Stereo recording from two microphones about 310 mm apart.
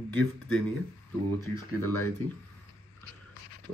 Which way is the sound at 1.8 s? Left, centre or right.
Centre.